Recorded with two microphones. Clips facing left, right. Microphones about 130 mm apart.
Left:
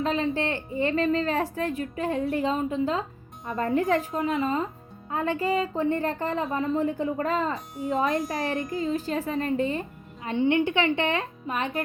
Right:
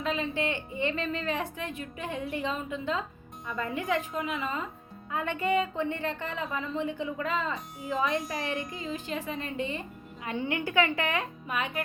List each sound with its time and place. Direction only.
0.0 s a woman's voice: 35° left (ahead or behind)
7.5 s speech: centre (ahead or behind)
8.3 s a woman's voice: 35° left (ahead or behind)
10.2 s a woman's voice: 25° left (ahead or behind)